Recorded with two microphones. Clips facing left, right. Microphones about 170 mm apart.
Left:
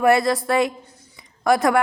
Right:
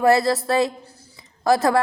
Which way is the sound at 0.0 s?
30° right (ahead or behind).